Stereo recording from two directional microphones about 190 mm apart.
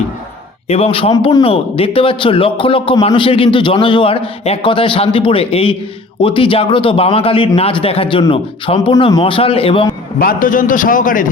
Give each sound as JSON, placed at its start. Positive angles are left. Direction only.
{"t": 0.7, "sound": "a man's voice", "side_deg": 30}
{"t": 10.2, "sound": "a man's voice", "side_deg": 50}